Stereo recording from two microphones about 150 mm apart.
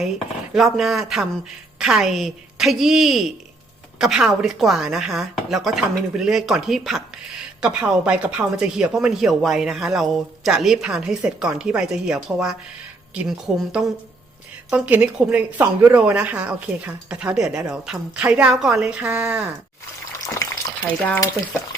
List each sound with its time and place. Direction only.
0.5 s a woman's voice: centre (ahead or behind)
20.2 s speech: 25° left (ahead or behind)
20.8 s speech: 10° left (ahead or behind)